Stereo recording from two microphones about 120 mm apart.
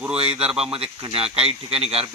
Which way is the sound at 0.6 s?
50° right (ahead or behind).